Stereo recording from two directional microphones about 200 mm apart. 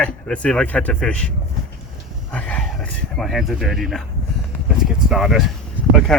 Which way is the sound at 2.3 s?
5° left (ahead or behind).